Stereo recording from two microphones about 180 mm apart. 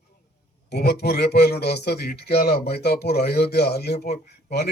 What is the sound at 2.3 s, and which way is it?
A man's voice, 50° left (ahead or behind).